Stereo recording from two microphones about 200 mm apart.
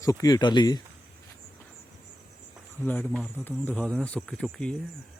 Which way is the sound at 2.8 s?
10° left (ahead or behind).